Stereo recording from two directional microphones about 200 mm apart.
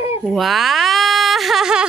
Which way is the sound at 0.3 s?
Centre (ahead or behind).